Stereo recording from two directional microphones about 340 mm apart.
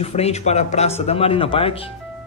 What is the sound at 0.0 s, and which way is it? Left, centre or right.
Speech, centre.